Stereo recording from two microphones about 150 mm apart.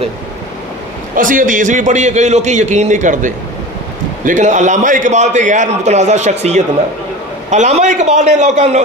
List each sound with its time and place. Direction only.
1.1 s a man's voice: 60° right (ahead or behind)